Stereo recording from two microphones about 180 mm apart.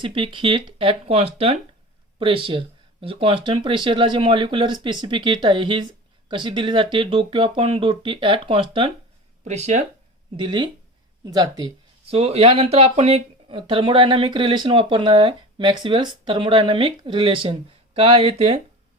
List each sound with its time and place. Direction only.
0.0 s speech: 30° right (ahead or behind)
10.3 s speech: 25° right (ahead or behind)
12.1 s speech: 35° right (ahead or behind)